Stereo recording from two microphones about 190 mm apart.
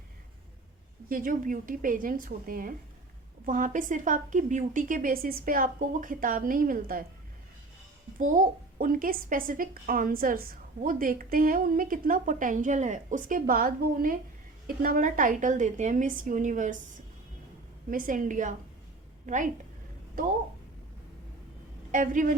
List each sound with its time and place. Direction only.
1.0 s a woman's voice: 45° right (ahead or behind)
8.2 s a woman's voice: 40° right (ahead or behind)
17.9 s a woman's voice: 45° right (ahead or behind)
21.9 s a woman's voice: 45° right (ahead or behind)